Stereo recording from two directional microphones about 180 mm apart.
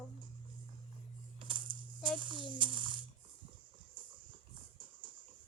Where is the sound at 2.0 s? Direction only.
25° right (ahead or behind).